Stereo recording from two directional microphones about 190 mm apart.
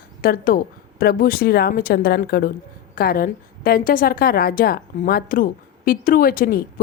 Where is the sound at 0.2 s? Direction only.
50° left (ahead or behind).